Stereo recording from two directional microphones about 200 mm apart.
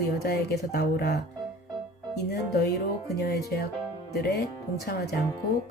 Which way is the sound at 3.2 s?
55° left (ahead or behind).